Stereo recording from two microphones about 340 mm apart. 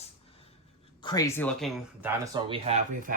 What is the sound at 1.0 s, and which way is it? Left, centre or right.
Speech, centre.